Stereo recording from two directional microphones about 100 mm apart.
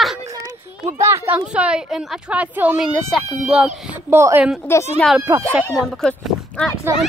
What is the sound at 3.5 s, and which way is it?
Speech, 15° right (ahead or behind).